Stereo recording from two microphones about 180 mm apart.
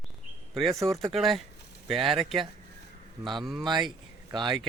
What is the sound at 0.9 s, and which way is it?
Speech, centre (ahead or behind).